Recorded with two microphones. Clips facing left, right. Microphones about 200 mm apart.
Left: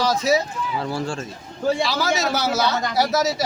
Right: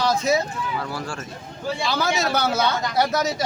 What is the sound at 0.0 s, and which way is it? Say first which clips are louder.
Speech: left 1 dB; centre (ahead or behind).